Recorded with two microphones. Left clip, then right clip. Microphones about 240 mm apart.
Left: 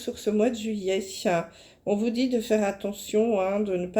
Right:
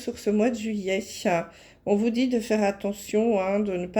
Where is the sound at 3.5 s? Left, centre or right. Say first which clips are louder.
Right 1 dB; right.